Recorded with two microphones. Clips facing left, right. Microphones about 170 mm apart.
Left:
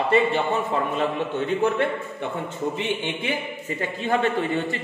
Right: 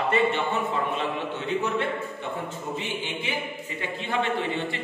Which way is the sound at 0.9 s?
45° left (ahead or behind).